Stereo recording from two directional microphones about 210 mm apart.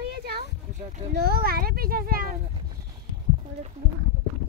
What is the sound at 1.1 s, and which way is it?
A child's voice, 45° right (ahead or behind).